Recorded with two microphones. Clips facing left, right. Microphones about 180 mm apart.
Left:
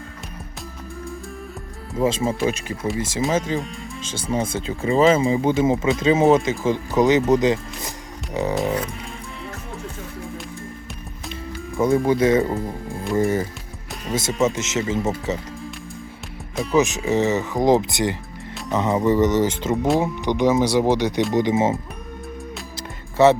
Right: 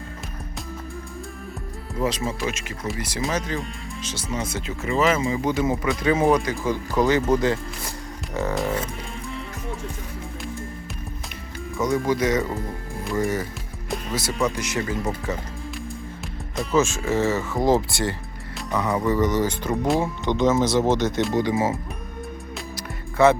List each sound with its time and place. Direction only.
2.0 s speech: 30° left (ahead or behind)
2.8 s speech: centre (ahead or behind)
4.3 s speech: 30° left (ahead or behind)
8.5 s music: centre (ahead or behind)
12.0 s speech: 25° left (ahead or behind)
12.5 s music: centre (ahead or behind)
14.1 s speech: 25° left (ahead or behind)
16.7 s speech: 15° left (ahead or behind)
19.7 s speech: centre (ahead or behind)
20.0 s speech: 15° left (ahead or behind)
23.1 s speech: 20° left (ahead or behind)